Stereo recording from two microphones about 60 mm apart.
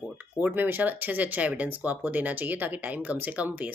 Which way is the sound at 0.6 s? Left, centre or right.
Right.